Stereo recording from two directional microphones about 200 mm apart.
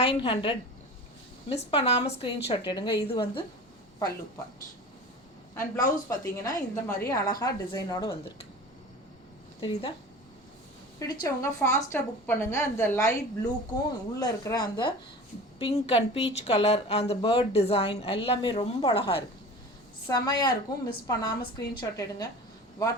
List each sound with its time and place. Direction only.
0.0 s a woman's voice: 25° left (ahead or behind)
5.5 s a woman's voice: 15° left (ahead or behind)
9.6 s a woman's voice: 25° left (ahead or behind)
11.0 s a woman's voice: 15° left (ahead or behind)